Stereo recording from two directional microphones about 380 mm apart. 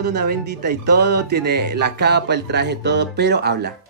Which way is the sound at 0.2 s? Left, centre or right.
Right.